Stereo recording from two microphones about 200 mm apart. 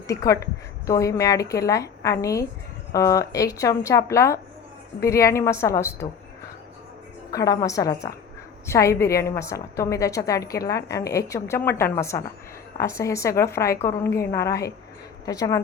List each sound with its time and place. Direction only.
0.1 s a woman's voice: 15° left (ahead or behind)
7.3 s a woman's voice: 15° left (ahead or behind)